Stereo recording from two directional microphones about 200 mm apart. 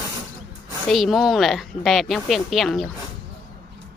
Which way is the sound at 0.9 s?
Centre (ahead or behind).